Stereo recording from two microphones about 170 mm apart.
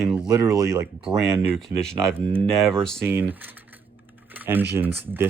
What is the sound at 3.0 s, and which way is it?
Speech, 10° right (ahead or behind).